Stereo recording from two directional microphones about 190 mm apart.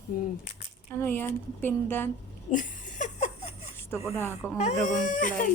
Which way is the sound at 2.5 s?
40° left (ahead or behind).